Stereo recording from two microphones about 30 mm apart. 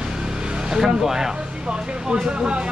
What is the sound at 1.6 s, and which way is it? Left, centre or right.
Speech, right.